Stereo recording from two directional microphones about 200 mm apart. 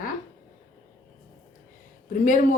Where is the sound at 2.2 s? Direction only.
40° left (ahead or behind).